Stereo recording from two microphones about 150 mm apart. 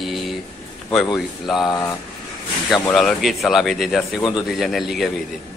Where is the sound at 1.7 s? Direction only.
20° left (ahead or behind).